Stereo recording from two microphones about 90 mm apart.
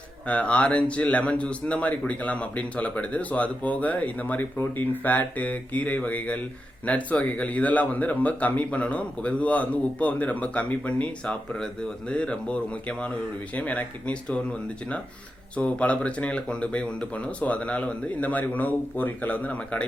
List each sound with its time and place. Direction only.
0.3 s speech: 15° left (ahead or behind)
15.5 s speech: 15° left (ahead or behind)